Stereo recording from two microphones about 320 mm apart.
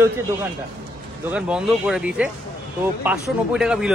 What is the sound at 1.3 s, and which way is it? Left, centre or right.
Speech, centre.